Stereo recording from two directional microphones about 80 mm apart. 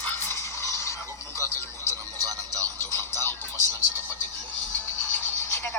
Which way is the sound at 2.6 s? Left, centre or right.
Left.